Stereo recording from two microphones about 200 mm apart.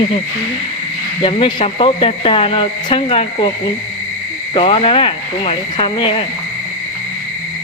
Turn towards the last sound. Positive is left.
turn(degrees=30)  # may be behind; listen again after turning